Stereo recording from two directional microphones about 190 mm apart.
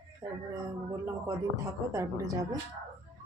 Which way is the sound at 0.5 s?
20° right (ahead or behind).